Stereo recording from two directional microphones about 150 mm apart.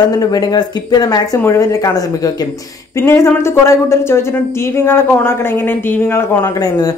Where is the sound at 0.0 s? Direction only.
25° left (ahead or behind).